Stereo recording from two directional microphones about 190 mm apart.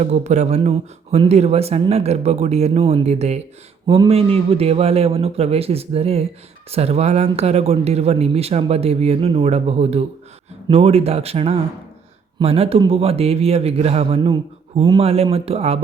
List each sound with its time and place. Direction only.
0.0 s speech: 35° right (ahead or behind)